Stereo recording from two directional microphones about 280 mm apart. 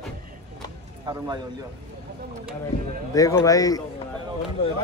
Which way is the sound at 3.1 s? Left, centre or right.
Centre.